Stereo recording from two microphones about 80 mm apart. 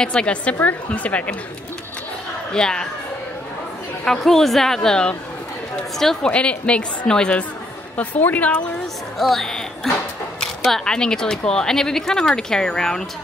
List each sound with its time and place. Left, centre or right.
0.0 s speech: centre
2.5 s speech: centre
4.0 s speech: centre
9.2 s a woman's voice: centre
9.9 s a sound: centre
10.4 s speech: centre